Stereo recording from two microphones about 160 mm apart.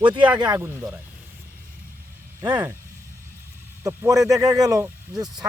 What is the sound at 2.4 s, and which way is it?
Speech, 25° right (ahead or behind).